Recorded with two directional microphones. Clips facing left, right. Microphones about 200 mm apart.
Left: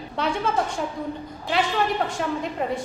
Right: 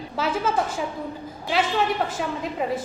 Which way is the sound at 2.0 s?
Centre (ahead or behind).